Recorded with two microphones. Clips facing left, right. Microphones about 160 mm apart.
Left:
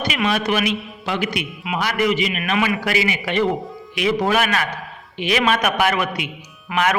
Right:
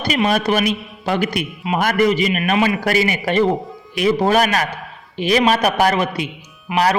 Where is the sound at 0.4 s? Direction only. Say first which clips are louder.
Right 3 dB; 40° right (ahead or behind).